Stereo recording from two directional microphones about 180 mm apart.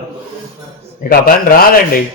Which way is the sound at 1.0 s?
50° left (ahead or behind).